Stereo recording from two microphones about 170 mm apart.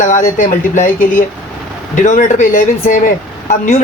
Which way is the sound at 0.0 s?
50° left (ahead or behind).